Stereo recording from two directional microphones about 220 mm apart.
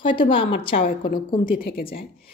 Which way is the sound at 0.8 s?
40° left (ahead or behind).